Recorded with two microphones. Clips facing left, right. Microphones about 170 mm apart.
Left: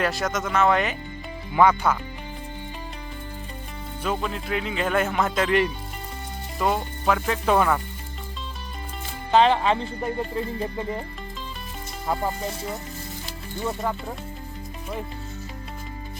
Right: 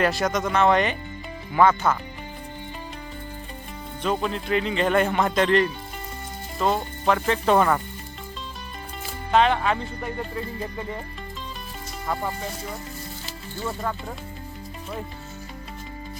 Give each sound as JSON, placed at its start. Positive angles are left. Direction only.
{"t": 0.0, "sound": "speech", "side_deg": 0}
{"t": 4.0, "sound": "speech", "side_deg": 5}
{"t": 6.6, "sound": "speech", "side_deg": 5}
{"t": 9.3, "sound": "speech", "side_deg": 30}
{"t": 13.6, "sound": "speech", "side_deg": 15}